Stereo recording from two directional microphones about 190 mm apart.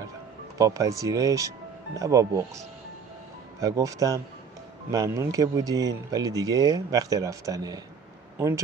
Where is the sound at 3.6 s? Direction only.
20° right (ahead or behind).